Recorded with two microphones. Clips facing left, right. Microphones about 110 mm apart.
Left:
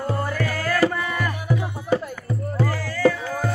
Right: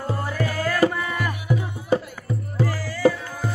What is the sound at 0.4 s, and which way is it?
Music, 25° right (ahead or behind).